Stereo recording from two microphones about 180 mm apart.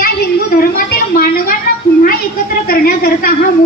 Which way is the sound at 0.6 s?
55° left (ahead or behind).